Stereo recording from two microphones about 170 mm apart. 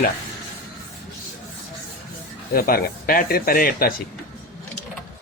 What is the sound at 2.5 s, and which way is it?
Speech, 60° left (ahead or behind).